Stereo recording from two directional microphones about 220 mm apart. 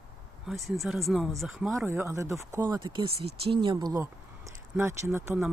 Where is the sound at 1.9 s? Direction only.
10° right (ahead or behind).